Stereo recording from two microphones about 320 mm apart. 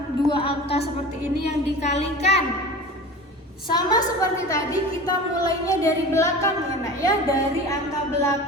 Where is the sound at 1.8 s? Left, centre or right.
Centre.